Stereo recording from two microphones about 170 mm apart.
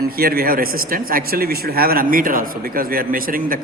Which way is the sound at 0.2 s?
60° right (ahead or behind).